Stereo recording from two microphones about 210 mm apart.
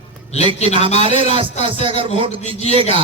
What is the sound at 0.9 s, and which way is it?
Speech, 30° left (ahead or behind).